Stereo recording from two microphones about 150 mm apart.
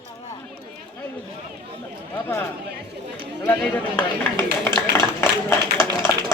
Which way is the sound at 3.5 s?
10° left (ahead or behind).